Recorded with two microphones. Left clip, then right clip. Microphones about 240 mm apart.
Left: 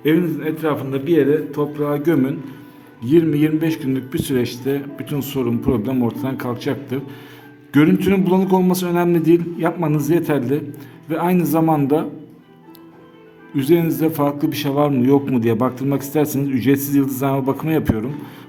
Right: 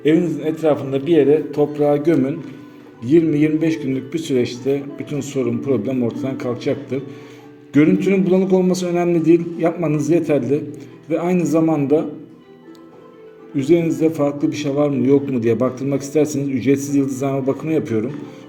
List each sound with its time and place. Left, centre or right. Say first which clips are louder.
0.0 s a man's voice: right 1 dB; centre
13.6 s a man's voice: right 1 dB; left